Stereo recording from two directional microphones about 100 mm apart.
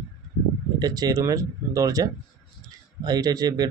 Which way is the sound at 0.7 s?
40° right (ahead or behind).